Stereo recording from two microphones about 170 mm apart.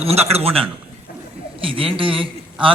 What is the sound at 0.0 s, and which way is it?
Speech, 35° right (ahead or behind).